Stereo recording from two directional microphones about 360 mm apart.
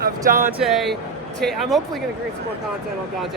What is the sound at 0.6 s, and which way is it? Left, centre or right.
Speech, centre.